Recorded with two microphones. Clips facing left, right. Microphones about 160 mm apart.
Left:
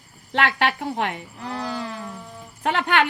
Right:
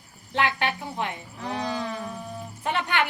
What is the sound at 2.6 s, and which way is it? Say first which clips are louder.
Speech: left 5 dB; 80° left.